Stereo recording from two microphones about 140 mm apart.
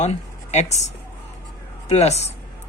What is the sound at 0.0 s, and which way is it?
Speech, 55° left (ahead or behind).